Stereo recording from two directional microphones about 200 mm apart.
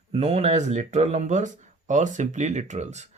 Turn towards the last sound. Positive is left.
turn(degrees=-35)  # may be behind; listen again after turning